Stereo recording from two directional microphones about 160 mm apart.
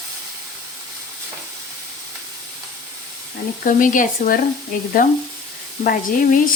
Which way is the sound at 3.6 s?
55° left (ahead or behind).